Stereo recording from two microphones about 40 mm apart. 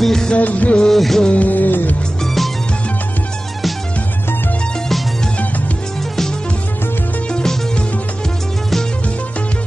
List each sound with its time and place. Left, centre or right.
0.0 s music of bollywood: centre
0.4 s music of bollywood: left
0.7 s music: centre
1.3 s music: left
7.3 s music: left